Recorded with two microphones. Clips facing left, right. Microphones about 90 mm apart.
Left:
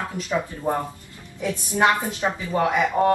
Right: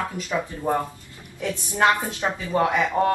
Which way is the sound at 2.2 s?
5° right (ahead or behind).